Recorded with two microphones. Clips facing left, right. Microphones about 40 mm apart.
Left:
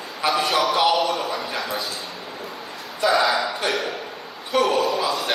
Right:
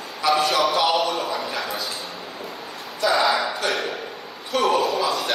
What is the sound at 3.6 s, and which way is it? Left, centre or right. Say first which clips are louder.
A man's voice: even; centre.